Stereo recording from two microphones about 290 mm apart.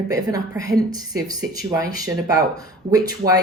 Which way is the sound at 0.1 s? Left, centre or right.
Centre.